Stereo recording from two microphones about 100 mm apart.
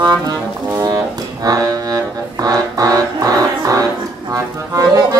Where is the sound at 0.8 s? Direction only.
35° right (ahead or behind).